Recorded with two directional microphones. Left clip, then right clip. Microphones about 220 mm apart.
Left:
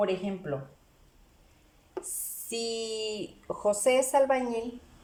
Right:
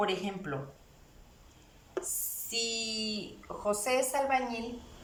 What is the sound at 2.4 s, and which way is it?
Speech, 35° left (ahead or behind).